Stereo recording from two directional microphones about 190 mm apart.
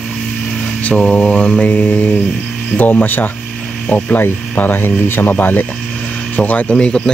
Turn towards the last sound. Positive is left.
turn(degrees=5)  # may be behind; listen again after turning